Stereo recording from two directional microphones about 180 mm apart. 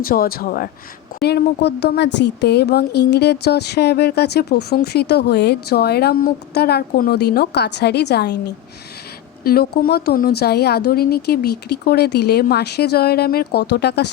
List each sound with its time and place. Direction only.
0.0 s speech: 55° left (ahead or behind)
1.2 s speech: 65° left (ahead or behind)